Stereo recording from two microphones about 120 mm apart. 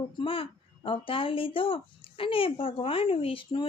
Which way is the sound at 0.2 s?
45° left (ahead or behind).